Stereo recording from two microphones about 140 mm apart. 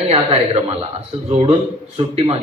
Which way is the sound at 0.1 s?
45° right (ahead or behind).